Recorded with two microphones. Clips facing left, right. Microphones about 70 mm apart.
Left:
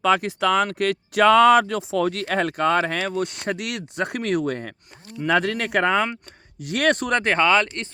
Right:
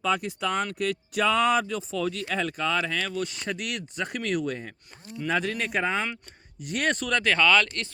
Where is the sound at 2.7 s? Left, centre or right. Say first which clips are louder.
Left 6 dB; left.